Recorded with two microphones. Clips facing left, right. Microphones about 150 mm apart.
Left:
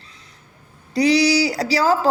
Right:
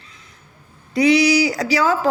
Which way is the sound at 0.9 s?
35° left (ahead or behind).